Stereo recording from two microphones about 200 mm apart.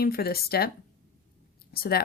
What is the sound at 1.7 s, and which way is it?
Speech, 50° left (ahead or behind).